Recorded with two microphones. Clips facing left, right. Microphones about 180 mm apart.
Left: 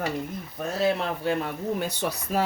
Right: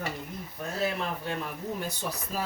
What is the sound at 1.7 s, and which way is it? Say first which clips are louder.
Speech: left 6 dB; 70° left (ahead or behind).